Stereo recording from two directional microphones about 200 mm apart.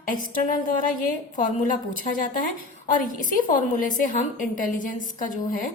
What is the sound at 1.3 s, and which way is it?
A woman's voice, 40° left (ahead or behind).